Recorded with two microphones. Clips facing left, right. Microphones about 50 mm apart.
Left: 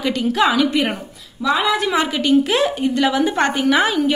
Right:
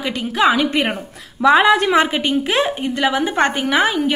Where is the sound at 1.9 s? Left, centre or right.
Right.